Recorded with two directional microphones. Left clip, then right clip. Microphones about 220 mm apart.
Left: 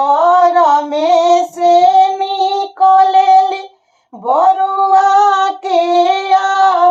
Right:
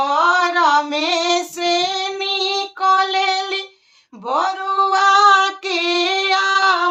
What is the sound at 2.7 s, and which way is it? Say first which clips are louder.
Child singing: left 8 dB; 25° right (ahead or behind).